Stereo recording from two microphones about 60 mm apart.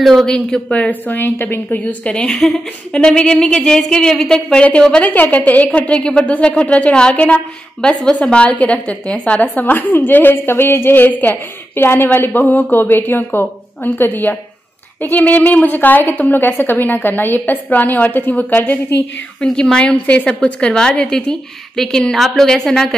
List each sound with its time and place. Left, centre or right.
0.0 s speech: centre
0.3 s a woman's voice: centre
0.7 s a woman's voice: left
1.1 s a woman's voice: left
1.9 s a woman's voice: centre
5.0 s a woman's voice: left
19.4 s a woman's voice: centre